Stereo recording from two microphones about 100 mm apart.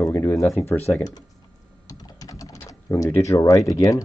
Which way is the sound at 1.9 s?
40° left (ahead or behind).